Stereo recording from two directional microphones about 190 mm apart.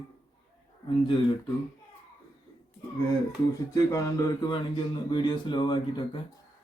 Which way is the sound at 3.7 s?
15° left (ahead or behind).